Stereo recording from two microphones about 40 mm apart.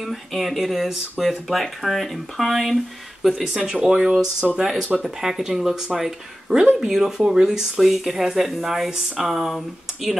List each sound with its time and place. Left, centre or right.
0.4 s speech: centre
1.5 s speech: centre
3.4 s speech: centre
7.8 s speech: centre
8.9 s speech: centre
9.3 s speech: centre